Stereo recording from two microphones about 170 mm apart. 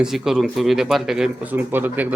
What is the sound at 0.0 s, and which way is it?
A man's voice, centre (ahead or behind).